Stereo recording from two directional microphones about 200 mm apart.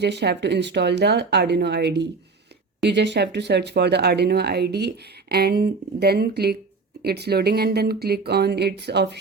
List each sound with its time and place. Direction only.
0.0 s speech: 55° right (ahead or behind)